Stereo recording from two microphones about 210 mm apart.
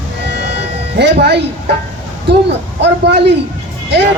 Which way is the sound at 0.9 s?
50° right (ahead or behind).